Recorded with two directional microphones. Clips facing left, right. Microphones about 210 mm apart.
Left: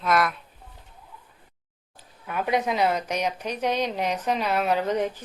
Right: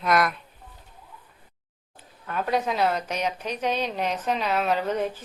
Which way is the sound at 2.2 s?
10° left (ahead or behind).